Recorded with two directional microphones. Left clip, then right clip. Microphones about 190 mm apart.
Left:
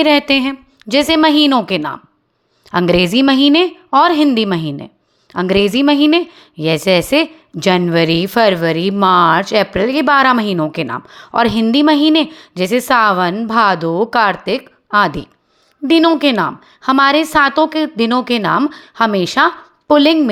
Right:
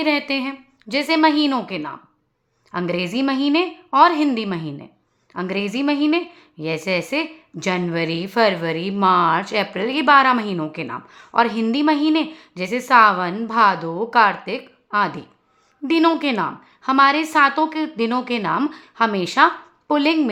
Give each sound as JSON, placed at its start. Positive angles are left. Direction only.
{"t": 0.0, "sound": "a woman's voice", "side_deg": 40}